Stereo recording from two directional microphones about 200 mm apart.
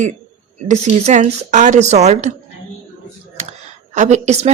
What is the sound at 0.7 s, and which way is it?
Speech, 35° right (ahead or behind).